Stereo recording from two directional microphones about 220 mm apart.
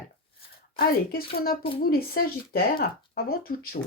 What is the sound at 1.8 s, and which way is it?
Speech, 40° left (ahead or behind).